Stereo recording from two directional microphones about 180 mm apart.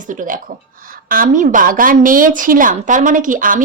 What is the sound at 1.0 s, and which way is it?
A woman's voice, 50° right (ahead or behind).